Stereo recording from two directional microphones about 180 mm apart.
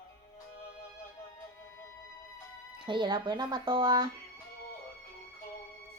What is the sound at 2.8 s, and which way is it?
Speech, 25° right (ahead or behind).